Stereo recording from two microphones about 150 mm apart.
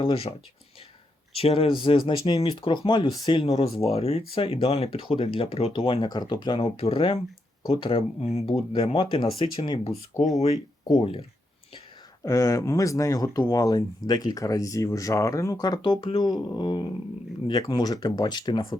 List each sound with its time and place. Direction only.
0.0 s speech: 35° left (ahead or behind)
12.2 s speech: 20° left (ahead or behind)